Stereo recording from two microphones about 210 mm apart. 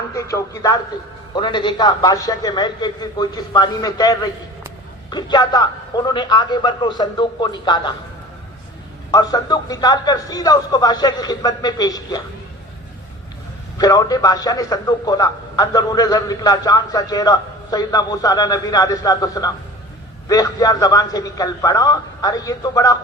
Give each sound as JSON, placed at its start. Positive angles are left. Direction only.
{"t": 0.1, "sound": "speech", "side_deg": 15}
{"t": 9.1, "sound": "speech", "side_deg": 20}
{"t": 13.7, "sound": "speech", "side_deg": 15}